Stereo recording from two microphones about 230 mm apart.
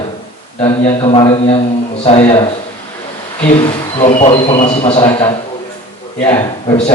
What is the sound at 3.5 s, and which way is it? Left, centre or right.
Speech, left.